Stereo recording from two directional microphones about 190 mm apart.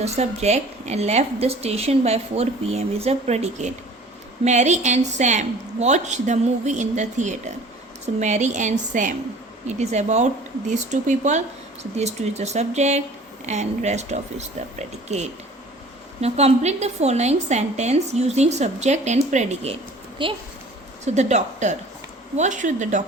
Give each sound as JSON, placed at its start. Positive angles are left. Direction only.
{"t": 0.0, "sound": "a woman's voice", "side_deg": -35}